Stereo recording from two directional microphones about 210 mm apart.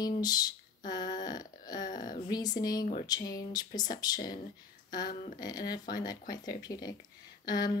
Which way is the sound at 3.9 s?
20° left (ahead or behind).